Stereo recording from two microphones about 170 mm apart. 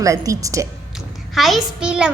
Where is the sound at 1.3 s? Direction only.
Centre (ahead or behind).